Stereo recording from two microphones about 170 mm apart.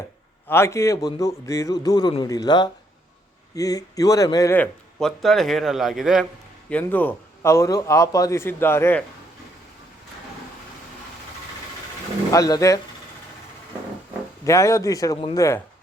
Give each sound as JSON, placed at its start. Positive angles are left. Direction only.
{"t": 0.4, "sound": "a man's voice", "side_deg": 15}
{"t": 6.7, "sound": "a man's voice", "side_deg": 10}
{"t": 12.3, "sound": "a man's voice", "side_deg": 20}
{"t": 14.4, "sound": "a man's voice", "side_deg": 15}